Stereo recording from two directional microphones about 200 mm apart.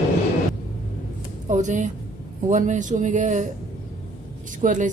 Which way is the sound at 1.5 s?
35° right (ahead or behind).